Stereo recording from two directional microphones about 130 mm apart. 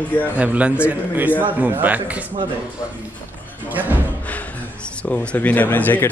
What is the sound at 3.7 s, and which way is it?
Speech, 15° right (ahead or behind).